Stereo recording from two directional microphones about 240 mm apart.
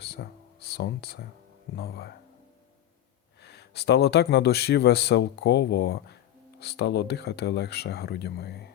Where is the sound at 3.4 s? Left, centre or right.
Left.